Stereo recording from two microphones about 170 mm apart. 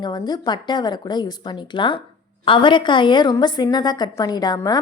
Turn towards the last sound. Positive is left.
turn(degrees=25)  # may be behind; listen again after turning